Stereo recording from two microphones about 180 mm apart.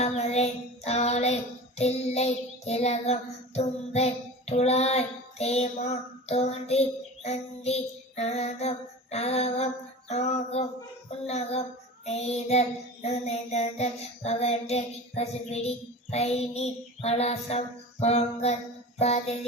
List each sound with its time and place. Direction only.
0.0 s child singing: 35° left (ahead or behind)